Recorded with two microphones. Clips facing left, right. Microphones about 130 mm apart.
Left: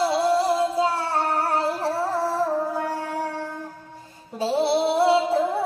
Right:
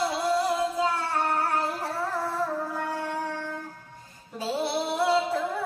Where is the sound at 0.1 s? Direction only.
30° left (ahead or behind).